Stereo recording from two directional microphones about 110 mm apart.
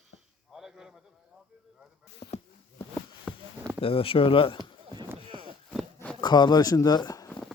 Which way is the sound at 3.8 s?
60° left (ahead or behind).